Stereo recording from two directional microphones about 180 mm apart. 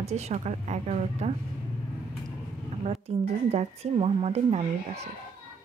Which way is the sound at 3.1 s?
35° right (ahead or behind).